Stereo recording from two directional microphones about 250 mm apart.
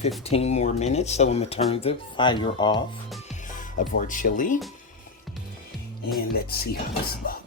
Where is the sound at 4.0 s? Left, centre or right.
Left.